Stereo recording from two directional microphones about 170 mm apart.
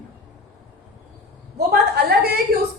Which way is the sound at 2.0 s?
70° right (ahead or behind).